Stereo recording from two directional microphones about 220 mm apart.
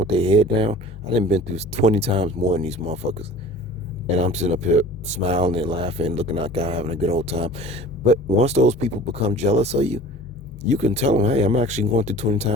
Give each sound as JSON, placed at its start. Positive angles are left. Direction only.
{"t": 0.0, "sound": "speech", "side_deg": -25}
{"t": 4.2, "sound": "speech", "side_deg": -30}